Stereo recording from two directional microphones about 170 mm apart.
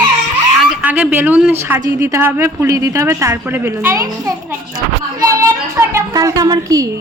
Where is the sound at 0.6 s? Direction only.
10° right (ahead or behind).